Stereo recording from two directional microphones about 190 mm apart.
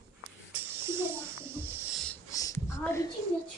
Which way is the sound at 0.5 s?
10° right (ahead or behind).